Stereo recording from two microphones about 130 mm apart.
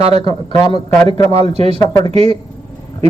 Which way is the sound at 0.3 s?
30° left (ahead or behind).